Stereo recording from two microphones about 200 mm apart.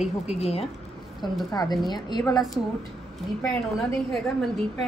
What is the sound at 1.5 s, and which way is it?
Speech, 20° left (ahead or behind).